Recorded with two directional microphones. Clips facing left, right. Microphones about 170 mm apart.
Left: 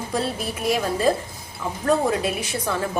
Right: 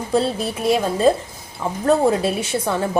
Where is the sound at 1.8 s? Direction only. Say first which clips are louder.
Right 4 dB; 30° right (ahead or behind).